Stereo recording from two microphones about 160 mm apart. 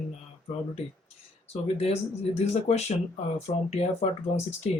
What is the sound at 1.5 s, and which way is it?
Speech, 40° left (ahead or behind).